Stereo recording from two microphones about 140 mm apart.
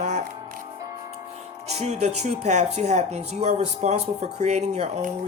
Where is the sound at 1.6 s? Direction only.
50° right (ahead or behind).